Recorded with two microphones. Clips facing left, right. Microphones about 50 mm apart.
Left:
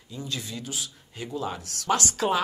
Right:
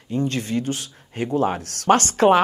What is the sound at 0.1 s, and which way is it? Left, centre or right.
Speech, right.